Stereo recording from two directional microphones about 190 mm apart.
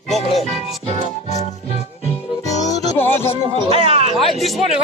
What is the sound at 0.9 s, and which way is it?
Music, 35° left (ahead or behind).